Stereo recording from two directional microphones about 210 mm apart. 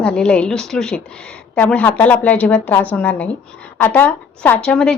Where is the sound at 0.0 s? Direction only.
5° left (ahead or behind).